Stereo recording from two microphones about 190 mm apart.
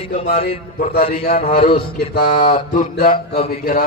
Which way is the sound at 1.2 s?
50° left (ahead or behind).